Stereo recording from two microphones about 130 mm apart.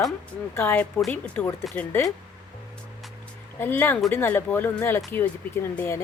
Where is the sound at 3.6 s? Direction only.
15° left (ahead or behind).